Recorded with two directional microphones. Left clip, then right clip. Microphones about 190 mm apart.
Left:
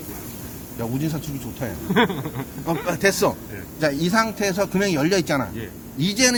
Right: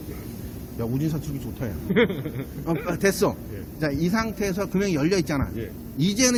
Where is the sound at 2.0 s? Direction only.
65° left (ahead or behind).